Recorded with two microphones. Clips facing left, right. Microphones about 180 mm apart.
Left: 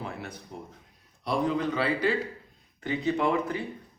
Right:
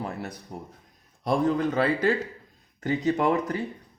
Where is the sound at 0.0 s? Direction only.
40° right (ahead or behind).